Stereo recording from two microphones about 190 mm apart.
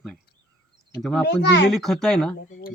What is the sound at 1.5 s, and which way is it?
Speech, 60° left (ahead or behind).